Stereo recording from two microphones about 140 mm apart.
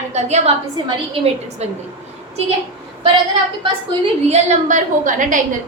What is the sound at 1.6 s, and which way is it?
Speech, 50° right (ahead or behind).